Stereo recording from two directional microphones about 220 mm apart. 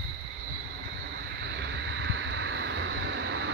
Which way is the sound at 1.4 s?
50° right (ahead or behind).